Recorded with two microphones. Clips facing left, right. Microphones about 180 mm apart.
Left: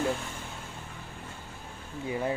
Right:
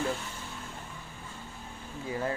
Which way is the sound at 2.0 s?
20° left (ahead or behind).